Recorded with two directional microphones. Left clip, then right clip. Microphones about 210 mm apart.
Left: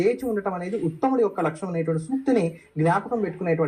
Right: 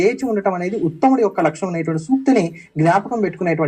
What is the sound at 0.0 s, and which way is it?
Speech, 30° right (ahead or behind).